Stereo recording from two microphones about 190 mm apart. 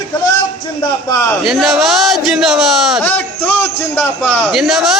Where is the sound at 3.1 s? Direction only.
10° left (ahead or behind).